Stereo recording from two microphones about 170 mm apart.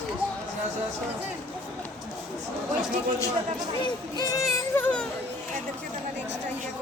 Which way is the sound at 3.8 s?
20° left (ahead or behind).